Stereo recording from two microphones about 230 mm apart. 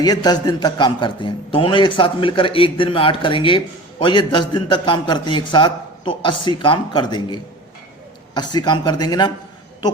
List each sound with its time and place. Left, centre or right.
0.0 s a man's voice: centre
8.4 s a man's voice: centre